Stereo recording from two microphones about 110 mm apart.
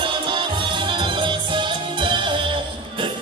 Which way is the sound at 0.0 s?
50° right (ahead or behind).